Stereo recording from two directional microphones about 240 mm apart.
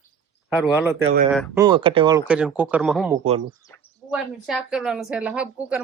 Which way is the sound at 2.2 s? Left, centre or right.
Centre.